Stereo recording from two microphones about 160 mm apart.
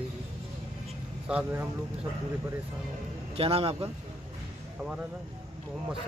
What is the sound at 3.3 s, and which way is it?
Speech, 35° right (ahead or behind).